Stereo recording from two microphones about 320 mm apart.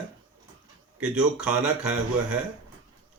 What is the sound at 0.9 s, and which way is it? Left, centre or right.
Speech, centre.